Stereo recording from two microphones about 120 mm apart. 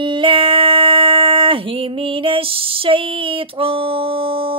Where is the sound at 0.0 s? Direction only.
45° right (ahead or behind).